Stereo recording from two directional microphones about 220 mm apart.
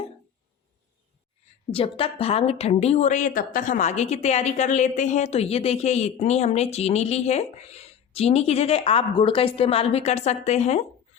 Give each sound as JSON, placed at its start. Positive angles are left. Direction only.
{"t": 1.7, "sound": "speech", "side_deg": 25}